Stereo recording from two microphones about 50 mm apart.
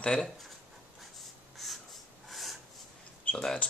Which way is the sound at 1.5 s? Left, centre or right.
Centre.